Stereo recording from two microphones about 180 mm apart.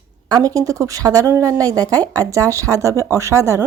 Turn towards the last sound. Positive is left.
turn(degrees=-15)  # may be behind; listen again after turning